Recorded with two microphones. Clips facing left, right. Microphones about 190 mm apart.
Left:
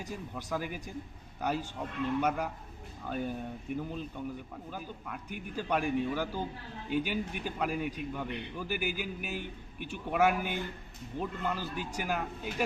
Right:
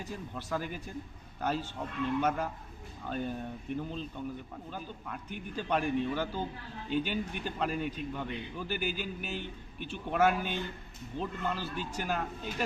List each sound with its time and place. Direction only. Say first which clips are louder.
0.0 s a man's voice: even; 10° left (ahead or behind)
8.3 s a man's voice: even; 65° left (ahead or behind)
8.5 s a man's voice: even; 10° left (ahead or behind)